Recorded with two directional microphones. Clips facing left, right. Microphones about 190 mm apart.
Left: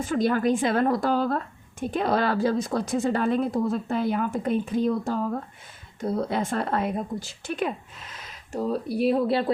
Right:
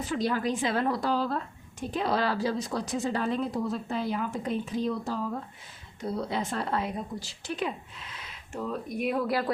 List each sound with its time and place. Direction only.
0.0 s a woman's voice: 50° left (ahead or behind); by 9.5 s 25° left (ahead or behind)